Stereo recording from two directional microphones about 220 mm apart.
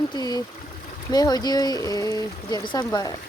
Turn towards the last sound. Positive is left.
turn(degrees=15)  # may be behind; listen again after turning